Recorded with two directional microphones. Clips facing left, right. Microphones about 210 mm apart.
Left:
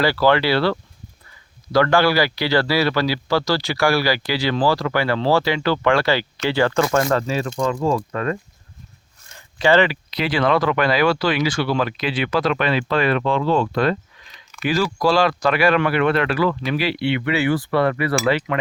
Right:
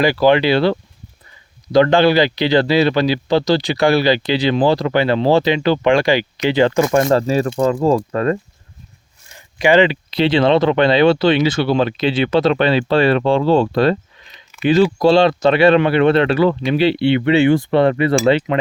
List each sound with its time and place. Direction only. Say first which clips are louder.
0.0 s speech: right 4 dB; 15° right (ahead or behind)
7.0 s speech: right 6 dB; 30° right (ahead or behind)
9.6 s speech: right 3 dB; 15° right (ahead or behind)